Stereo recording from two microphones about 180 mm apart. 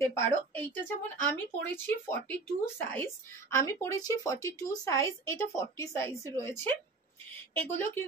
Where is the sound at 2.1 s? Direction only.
10° left (ahead or behind).